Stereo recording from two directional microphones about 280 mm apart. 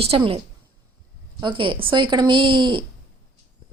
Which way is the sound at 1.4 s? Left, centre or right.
Centre.